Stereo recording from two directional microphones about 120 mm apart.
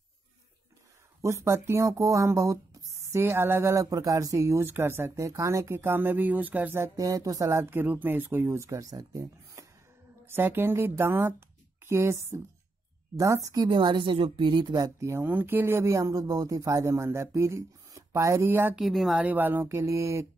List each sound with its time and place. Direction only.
1.2 s speech: 25° right (ahead or behind)
7.0 s speech: 30° right (ahead or behind)
13.7 s speech: 40° right (ahead or behind); by 18.8 s 15° right (ahead or behind)
18.8 s speech: centre (ahead or behind)
19.1 s speech: 15° right (ahead or behind)